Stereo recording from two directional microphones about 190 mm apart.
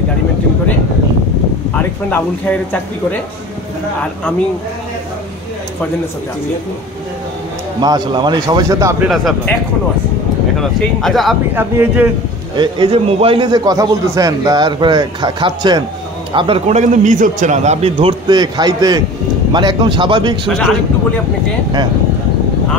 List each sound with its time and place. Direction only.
1.7 s speech: 10° left (ahead or behind)
7.8 s a man's voice: 20° right (ahead or behind)
10.6 s speech: centre (ahead or behind)
11.5 s speech: 10° right (ahead or behind)
12.5 s a man's voice: 25° right (ahead or behind)
20.4 s speech: centre (ahead or behind)